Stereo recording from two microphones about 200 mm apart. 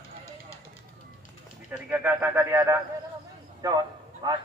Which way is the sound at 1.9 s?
10° right (ahead or behind).